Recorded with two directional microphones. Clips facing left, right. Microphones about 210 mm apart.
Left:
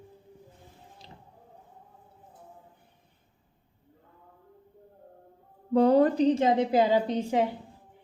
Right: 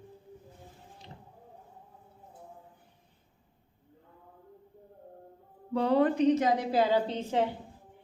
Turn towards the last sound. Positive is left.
turn(degrees=10)  # may be behind; listen again after turning